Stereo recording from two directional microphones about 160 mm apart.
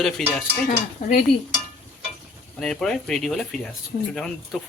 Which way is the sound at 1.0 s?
55° left (ahead or behind).